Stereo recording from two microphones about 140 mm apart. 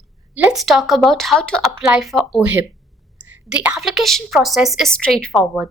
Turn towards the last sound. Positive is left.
turn(degrees=-5)  # may be behind; listen again after turning